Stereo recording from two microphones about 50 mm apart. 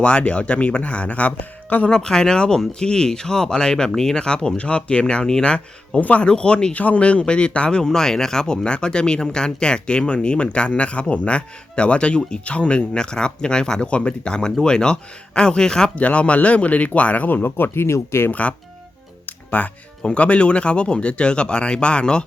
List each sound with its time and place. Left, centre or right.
0.0 s speech: left
1.9 s speech: centre; by 6.2 s left
6.2 s speech: centre
16.0 s speech: left
17.8 s speech: left
18.3 s speech: left
19.2 s music: left
20.0 s speech: left